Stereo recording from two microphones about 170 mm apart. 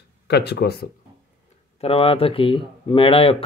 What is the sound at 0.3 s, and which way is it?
Speech, 75° left (ahead or behind).